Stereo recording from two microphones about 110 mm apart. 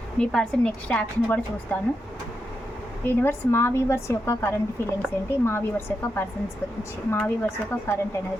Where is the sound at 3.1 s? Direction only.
20° left (ahead or behind).